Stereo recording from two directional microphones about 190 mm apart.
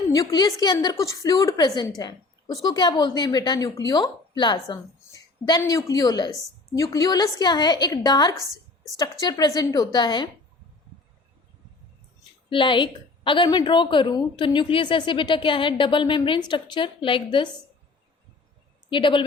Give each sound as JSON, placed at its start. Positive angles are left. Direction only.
{"t": 0.1, "sound": "a woman's voice", "side_deg": 20}
{"t": 12.5, "sound": "a woman's voice", "side_deg": 25}
{"t": 18.9, "sound": "a woman's voice", "side_deg": 25}